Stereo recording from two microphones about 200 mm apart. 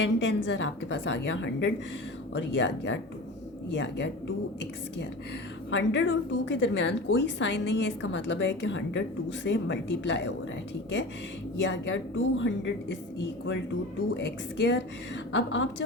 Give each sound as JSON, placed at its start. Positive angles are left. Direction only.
{"t": 0.0, "sound": "a woman's voice", "side_deg": 65}
{"t": 5.7, "sound": "a woman's voice", "side_deg": 65}
{"t": 11.6, "sound": "a woman's voice", "side_deg": 65}
{"t": 14.2, "sound": "a woman's voice", "side_deg": 65}